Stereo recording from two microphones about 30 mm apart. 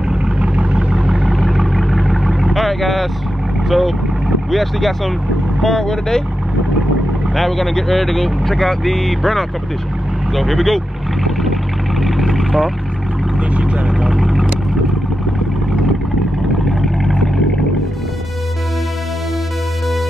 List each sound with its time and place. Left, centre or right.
0.2 s vehicle: right
1.3 s vehicle: centre
2.5 s vehicle: centre
3.6 s speech: centre
5.7 s speech: centre
7.3 s speech: centre
12.0 s vehicle: centre
13.4 s vehicle: right
14.1 s speech: centre
16.6 s vehicle: centre